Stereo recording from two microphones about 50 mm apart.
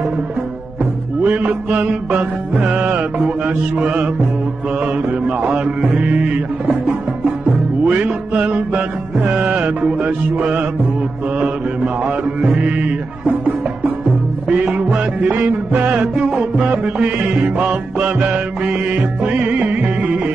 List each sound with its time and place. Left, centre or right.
1.2 s music: right
5.2 s music: right
14.5 s music: right
16.2 s music: right